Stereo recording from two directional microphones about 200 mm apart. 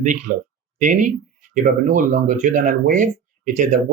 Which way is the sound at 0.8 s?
35° right (ahead or behind).